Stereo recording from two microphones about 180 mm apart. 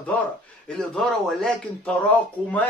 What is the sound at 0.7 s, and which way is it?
Speech, 5° left (ahead or behind).